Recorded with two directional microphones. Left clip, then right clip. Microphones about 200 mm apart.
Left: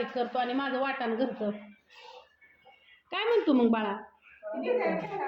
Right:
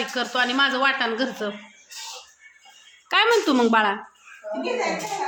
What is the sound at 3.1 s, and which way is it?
Speech, 20° right (ahead or behind).